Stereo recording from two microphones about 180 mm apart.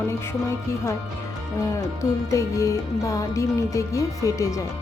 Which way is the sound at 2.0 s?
15° left (ahead or behind).